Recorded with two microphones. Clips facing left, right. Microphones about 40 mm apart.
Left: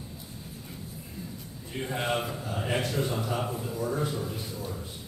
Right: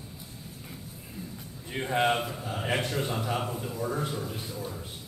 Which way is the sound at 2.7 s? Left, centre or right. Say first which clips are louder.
Left 1 dB; centre.